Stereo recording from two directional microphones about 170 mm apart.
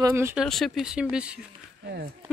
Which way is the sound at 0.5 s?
Centre (ahead or behind).